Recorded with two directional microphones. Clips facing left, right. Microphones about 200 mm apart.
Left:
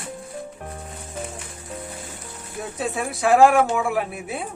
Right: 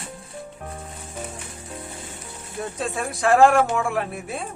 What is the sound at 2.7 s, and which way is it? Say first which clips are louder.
Speech: left 3 dB; 5° left (ahead or behind).